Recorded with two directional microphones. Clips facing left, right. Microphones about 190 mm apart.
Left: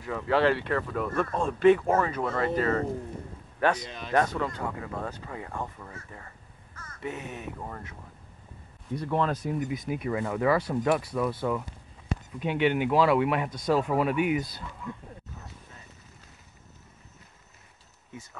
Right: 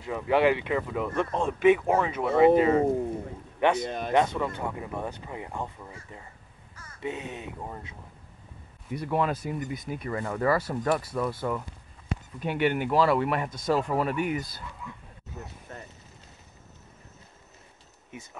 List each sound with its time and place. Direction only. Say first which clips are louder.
0.0 s a man's voice: right 1 dB; 15° right (ahead or behind)
3.8 s speech: right 8 dB; 50° right (ahead or behind)
4.1 s speech: right 1 dB; 20° right (ahead or behind)
8.9 s speech: even; 10° right (ahead or behind)
9.6 s speech: left 3 dB; 5° left (ahead or behind)
12.4 s speech: left 1 dB; 5° right (ahead or behind)
15.7 s a sound: right 10 dB; 70° right (ahead or behind)